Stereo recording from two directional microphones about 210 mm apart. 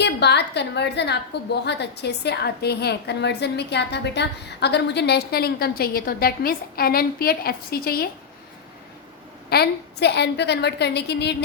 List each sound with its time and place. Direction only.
0.0 s a woman's voice: 55° left (ahead or behind)
9.5 s a woman's voice: 50° left (ahead or behind)